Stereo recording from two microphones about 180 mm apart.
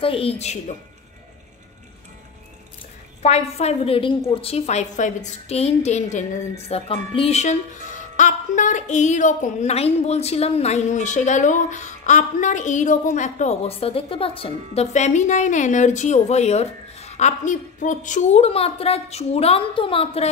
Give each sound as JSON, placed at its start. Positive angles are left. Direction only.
{"t": 0.0, "sound": "a woman's voice", "side_deg": 30}
{"t": 3.2, "sound": "a woman's voice", "side_deg": 35}